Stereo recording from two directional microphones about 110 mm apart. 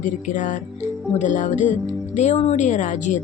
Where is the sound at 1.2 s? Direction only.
90° left.